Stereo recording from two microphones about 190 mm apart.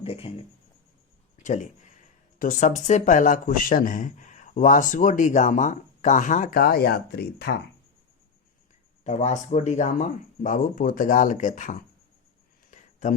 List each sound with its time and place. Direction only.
0.0 s speech: 30° left (ahead or behind)
1.4 s speech: 40° left (ahead or behind); by 7.6 s 55° left (ahead or behind)
9.0 s speech: 40° left (ahead or behind)
12.7 s a sound: 40° left (ahead or behind)